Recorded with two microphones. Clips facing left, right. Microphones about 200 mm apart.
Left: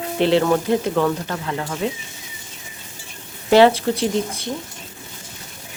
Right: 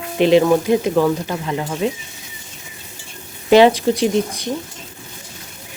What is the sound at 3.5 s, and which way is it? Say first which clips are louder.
Speech: right 2 dB; 15° right (ahead or behind).